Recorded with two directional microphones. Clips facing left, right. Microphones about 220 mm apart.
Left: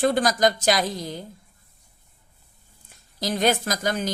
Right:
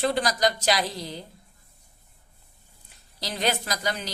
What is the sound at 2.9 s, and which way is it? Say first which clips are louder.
A woman's voice: left 8 dB; 45° left (ahead or behind).